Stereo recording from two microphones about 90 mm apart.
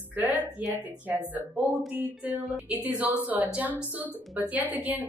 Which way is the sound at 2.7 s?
15° right (ahead or behind).